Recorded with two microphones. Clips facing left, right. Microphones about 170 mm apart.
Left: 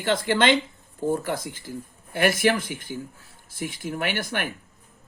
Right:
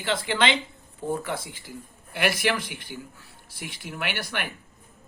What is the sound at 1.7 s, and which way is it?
Speech, 50° left (ahead or behind).